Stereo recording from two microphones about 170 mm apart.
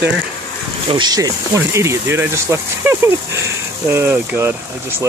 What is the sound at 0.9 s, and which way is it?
Speech, 25° right (ahead or behind).